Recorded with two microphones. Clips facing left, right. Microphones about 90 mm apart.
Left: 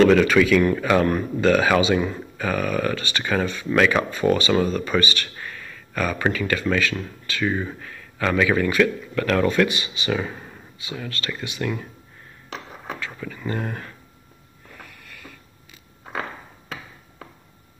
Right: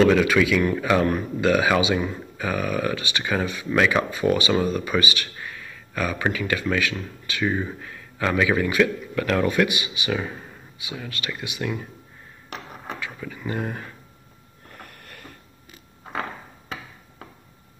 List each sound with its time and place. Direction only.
0.0 s speech: 5° right (ahead or behind)
10.1 s speech: centre (ahead or behind)
13.0 s speech: 10° right (ahead or behind)